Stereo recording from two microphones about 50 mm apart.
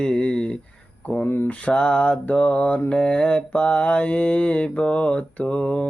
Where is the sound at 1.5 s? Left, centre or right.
Left.